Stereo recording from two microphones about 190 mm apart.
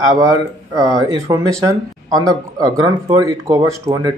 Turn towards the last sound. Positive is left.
turn(degrees=-20)  # may be behind; listen again after turning